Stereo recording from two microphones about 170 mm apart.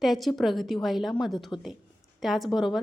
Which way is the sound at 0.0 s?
Centre (ahead or behind).